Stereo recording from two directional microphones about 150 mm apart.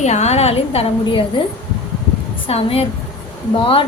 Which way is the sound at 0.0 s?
50° left (ahead or behind).